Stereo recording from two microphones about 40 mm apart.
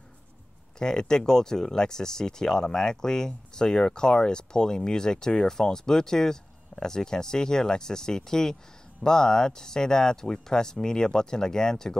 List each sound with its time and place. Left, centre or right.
0.7 s speech: centre